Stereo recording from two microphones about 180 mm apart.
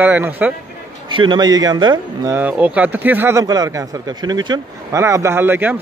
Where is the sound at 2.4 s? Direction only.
10° right (ahead or behind).